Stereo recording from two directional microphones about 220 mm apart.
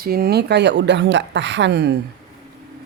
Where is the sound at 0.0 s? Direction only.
45° right (ahead or behind).